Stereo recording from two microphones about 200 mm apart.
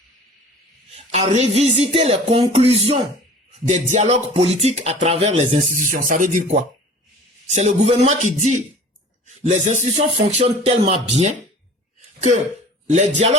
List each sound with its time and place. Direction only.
0.9 s speech: 30° right (ahead or behind)
5.7 s speech: 40° right (ahead or behind)
12.9 s speech: 35° right (ahead or behind)